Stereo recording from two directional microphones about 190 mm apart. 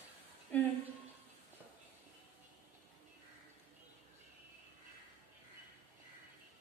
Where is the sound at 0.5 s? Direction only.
10° left (ahead or behind).